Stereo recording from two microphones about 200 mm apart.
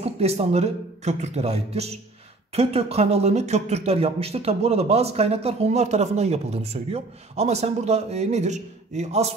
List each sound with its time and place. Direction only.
0.0 s speech: 30° right (ahead or behind)